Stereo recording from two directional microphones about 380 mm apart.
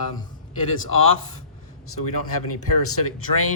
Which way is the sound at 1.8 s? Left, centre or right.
Left.